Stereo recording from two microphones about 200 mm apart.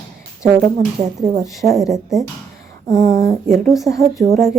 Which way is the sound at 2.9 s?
45° right (ahead or behind).